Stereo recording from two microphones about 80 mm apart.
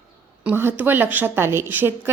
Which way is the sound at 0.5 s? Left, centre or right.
Right.